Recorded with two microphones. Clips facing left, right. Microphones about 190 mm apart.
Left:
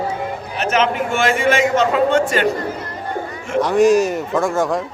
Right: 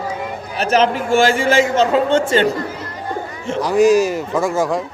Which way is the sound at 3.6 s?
Centre (ahead or behind).